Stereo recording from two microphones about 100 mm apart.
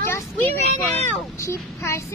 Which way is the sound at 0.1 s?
20° left (ahead or behind).